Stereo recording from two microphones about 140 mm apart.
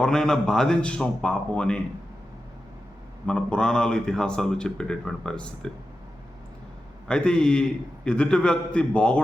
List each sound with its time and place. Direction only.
0.0 s a man's voice: 5° left (ahead or behind)
3.2 s speech: 5° left (ahead or behind)
7.1 s a man's voice: 5° left (ahead or behind)